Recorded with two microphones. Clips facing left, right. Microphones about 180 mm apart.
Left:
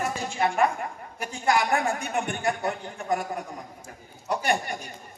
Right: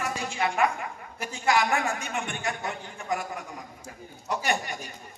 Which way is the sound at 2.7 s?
35° left (ahead or behind).